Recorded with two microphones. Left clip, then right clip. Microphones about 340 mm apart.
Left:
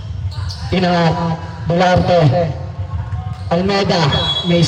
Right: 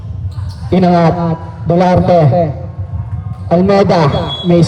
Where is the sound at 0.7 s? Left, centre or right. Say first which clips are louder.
Right 5 dB; right.